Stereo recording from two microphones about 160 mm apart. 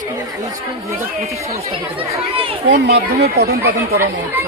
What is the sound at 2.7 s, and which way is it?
Speech, 90° right.